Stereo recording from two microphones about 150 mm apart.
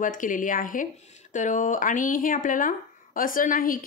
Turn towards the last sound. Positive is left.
turn(degrees=65)  # may be behind; listen again after turning